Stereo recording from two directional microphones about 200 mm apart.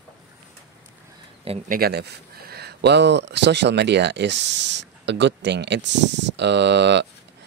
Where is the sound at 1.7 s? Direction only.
50° right (ahead or behind).